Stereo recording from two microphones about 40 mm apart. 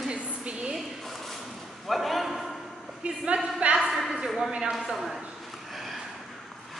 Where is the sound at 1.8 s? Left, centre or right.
Centre.